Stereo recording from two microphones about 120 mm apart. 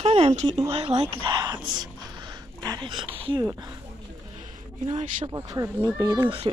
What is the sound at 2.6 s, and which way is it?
Speech, 35° right (ahead or behind).